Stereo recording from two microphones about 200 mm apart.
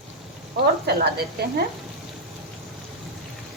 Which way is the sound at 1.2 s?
50° right (ahead or behind).